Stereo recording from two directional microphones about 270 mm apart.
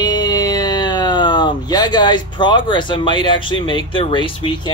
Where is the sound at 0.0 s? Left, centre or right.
Centre.